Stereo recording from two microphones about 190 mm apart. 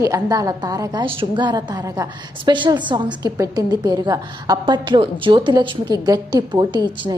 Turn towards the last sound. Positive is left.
turn(degrees=-25)  # may be behind; listen again after turning